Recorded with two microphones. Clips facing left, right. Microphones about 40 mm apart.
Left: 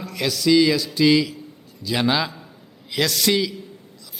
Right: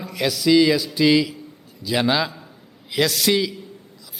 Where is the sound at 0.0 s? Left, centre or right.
Centre.